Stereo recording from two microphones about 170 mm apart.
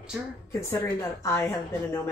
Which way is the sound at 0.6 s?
15° left (ahead or behind).